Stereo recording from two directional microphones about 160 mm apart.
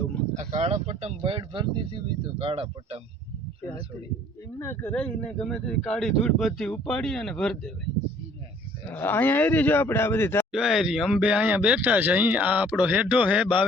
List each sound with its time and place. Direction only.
0.3 s speech: 40° right (ahead or behind)
4.5 s speech: 15° left (ahead or behind)
8.9 s speech: 10° left (ahead or behind)
10.5 s speech: 5° right (ahead or behind)